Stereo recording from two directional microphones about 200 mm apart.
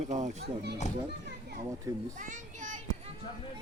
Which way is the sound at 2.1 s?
40° right (ahead or behind).